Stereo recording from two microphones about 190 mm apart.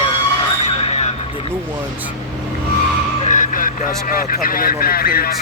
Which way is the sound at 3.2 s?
40° left (ahead or behind).